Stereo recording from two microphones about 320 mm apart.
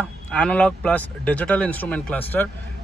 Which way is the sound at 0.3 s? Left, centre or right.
Centre.